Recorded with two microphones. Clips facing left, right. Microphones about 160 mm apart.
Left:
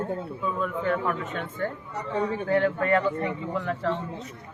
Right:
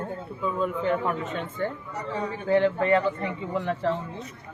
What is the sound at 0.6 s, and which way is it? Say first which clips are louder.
Speech: right 2 dB; 20° right (ahead or behind).